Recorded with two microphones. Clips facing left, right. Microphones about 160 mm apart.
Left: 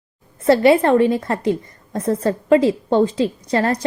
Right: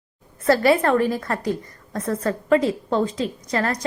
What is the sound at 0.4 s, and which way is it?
A woman's voice, 25° left (ahead or behind).